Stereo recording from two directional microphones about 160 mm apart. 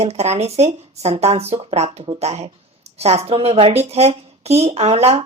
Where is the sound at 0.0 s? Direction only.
40° right (ahead or behind).